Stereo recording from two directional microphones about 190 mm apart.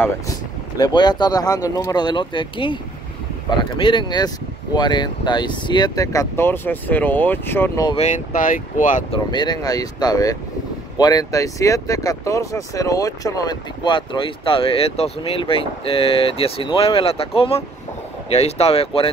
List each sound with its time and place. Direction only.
0.7 s speech: 20° left (ahead or behind)
7.9 s speech: 35° left (ahead or behind)
9.1 s speech: 25° left (ahead or behind)